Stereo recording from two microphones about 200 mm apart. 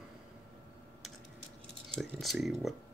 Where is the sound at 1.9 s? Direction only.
Centre (ahead or behind).